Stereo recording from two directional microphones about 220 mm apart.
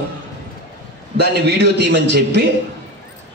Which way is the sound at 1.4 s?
50° right (ahead or behind).